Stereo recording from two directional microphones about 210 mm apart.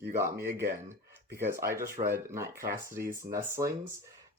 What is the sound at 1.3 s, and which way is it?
Speech, 10° right (ahead or behind).